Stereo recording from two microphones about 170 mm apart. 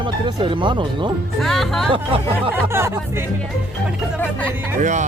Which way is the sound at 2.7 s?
15° right (ahead or behind).